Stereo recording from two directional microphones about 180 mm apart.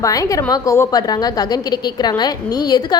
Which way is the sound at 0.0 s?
20° left (ahead or behind).